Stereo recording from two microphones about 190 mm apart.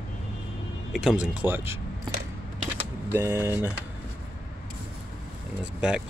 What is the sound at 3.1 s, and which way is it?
Speech, 10° right (ahead or behind).